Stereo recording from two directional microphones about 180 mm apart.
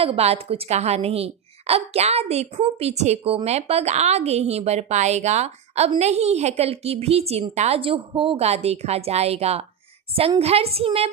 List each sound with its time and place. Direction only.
0.0 s a woman's voice: 35° right (ahead or behind)